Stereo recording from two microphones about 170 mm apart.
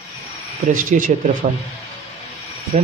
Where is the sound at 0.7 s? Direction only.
50° right (ahead or behind).